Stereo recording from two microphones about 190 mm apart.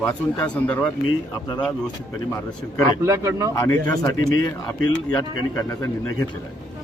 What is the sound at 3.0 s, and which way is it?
Speech, 15° right (ahead or behind).